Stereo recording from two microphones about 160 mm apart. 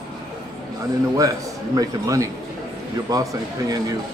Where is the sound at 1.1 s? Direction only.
20° right (ahead or behind).